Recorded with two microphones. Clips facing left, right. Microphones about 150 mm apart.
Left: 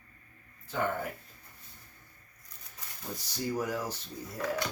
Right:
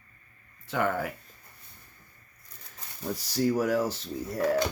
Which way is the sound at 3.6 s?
90° right.